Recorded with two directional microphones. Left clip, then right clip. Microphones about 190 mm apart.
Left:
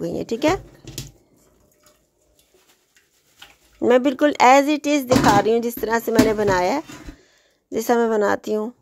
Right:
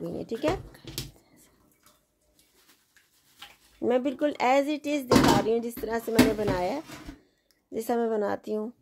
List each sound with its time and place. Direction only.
0.0 s speech: 25° left (ahead or behind)
3.8 s speech: 20° left (ahead or behind)